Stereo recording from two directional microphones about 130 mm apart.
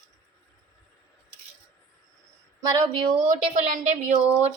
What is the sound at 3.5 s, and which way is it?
A woman's voice, 65° right (ahead or behind).